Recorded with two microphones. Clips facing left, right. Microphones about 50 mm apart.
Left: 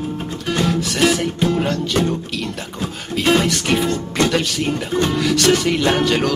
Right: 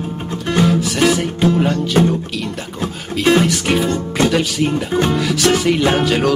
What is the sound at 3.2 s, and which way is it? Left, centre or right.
Speech, centre.